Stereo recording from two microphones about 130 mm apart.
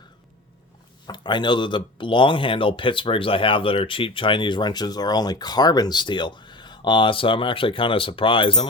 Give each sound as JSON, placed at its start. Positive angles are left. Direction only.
{"t": 1.0, "sound": "speech", "side_deg": 35}